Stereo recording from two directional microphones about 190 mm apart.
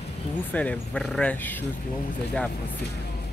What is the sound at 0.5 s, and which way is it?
Speech, 10° left (ahead or behind).